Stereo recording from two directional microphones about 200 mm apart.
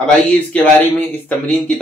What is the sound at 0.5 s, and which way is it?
Speech, 10° left (ahead or behind).